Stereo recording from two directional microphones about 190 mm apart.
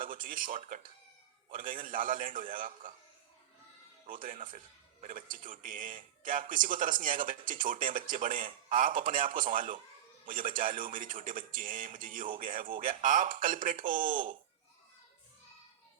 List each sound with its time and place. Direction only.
0.0 s speech: 45° right (ahead or behind)
4.1 s speech: 45° right (ahead or behind)